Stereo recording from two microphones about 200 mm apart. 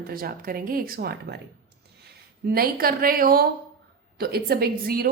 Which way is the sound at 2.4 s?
50° right (ahead or behind).